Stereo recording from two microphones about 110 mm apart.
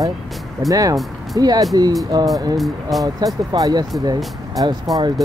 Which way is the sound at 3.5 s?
35° right (ahead or behind).